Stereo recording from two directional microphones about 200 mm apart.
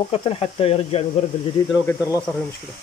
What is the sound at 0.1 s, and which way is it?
Speech, 30° left (ahead or behind).